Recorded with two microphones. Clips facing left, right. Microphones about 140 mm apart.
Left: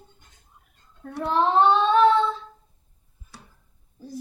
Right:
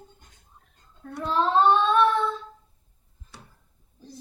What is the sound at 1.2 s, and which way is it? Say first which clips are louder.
Child singing: left 2 dB; 20° left (ahead or behind).